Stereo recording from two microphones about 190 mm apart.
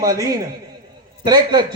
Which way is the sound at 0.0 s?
20° right (ahead or behind).